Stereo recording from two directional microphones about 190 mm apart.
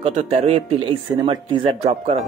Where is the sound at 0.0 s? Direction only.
35° right (ahead or behind).